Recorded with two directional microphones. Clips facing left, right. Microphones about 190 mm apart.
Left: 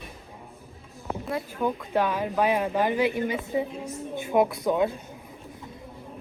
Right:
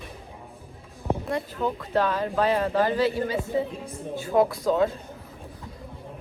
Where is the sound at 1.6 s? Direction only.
10° left (ahead or behind).